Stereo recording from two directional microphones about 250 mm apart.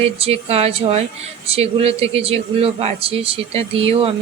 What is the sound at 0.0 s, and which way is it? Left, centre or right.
A man's voice, right.